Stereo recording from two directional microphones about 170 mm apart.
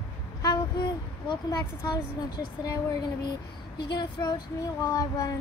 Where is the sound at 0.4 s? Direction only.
25° left (ahead or behind).